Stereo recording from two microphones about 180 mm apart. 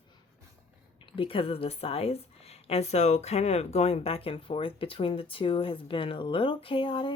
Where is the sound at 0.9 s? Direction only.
30° left (ahead or behind).